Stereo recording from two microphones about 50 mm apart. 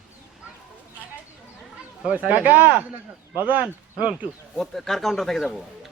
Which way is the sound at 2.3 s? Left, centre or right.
Right.